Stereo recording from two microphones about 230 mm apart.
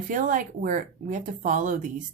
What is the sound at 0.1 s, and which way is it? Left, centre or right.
Speech, right.